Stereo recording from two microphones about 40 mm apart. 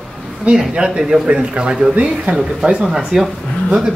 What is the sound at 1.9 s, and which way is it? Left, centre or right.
Speech, right.